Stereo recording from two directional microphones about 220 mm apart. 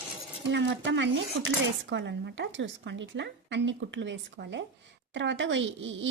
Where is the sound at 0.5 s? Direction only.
55° right (ahead or behind).